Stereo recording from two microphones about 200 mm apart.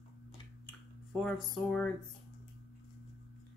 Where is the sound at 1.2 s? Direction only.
5° left (ahead or behind).